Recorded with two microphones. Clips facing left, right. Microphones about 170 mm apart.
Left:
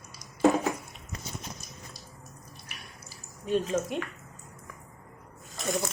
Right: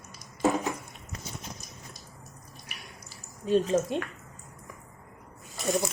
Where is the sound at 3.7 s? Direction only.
30° right (ahead or behind).